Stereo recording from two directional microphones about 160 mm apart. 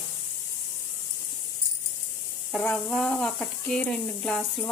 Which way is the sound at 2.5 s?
5° left (ahead or behind).